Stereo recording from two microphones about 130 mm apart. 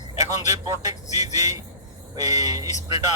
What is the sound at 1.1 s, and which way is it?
Speech, 60° left (ahead or behind).